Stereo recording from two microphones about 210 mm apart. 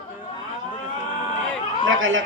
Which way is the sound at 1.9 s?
70° right (ahead or behind).